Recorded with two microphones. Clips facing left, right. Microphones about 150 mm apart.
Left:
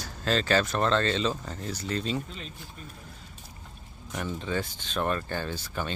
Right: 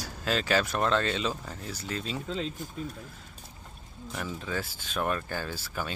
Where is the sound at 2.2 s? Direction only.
90° right.